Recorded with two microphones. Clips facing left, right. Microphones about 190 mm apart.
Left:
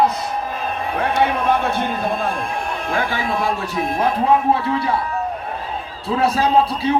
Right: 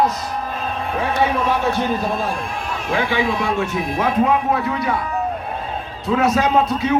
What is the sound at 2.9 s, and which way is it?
Speech, 45° left (ahead or behind).